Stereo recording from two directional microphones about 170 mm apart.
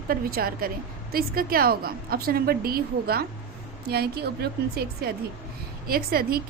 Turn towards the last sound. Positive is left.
turn(degrees=-60)  # may be behind; listen again after turning